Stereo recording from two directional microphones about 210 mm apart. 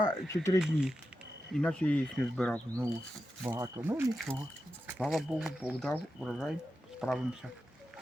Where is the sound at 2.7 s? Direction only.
15° right (ahead or behind).